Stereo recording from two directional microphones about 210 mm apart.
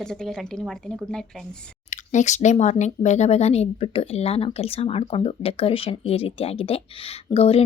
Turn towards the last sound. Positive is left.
turn(degrees=30)  # may be behind; listen again after turning